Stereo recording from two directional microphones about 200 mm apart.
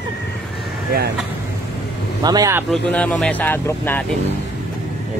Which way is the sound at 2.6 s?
5° left (ahead or behind).